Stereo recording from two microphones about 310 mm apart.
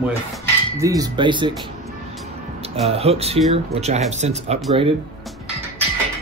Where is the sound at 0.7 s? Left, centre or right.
Centre.